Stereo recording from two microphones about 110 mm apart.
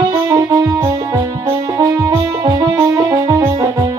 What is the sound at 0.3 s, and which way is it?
Music, 30° right (ahead or behind).